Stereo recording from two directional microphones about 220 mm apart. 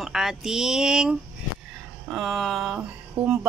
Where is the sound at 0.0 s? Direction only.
Centre (ahead or behind).